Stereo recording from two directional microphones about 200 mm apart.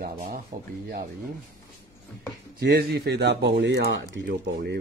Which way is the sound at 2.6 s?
50° right (ahead or behind).